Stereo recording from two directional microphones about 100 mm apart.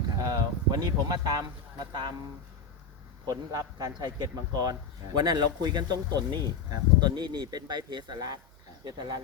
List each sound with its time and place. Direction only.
0.2 s speech: 40° right (ahead or behind)
3.2 s speech: 40° right (ahead or behind)